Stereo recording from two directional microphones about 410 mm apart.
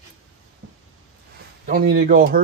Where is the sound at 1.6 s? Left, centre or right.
Right.